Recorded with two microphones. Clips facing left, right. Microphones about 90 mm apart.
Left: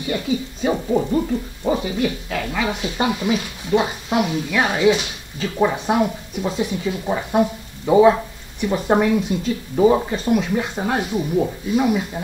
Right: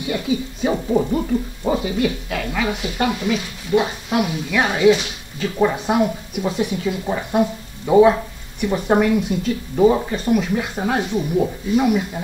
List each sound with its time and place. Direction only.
0.7 s speech: 5° right (ahead or behind)
3.0 s speech: 20° left (ahead or behind)
4.1 s speech: centre (ahead or behind)